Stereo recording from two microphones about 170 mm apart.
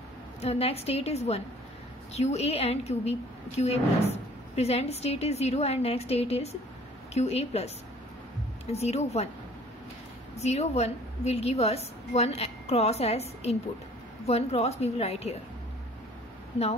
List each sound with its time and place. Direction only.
0.4 s a woman's voice: 35° left (ahead or behind)
8.7 s a woman's voice: 40° left (ahead or behind)
10.3 s a woman's voice: 40° left (ahead or behind)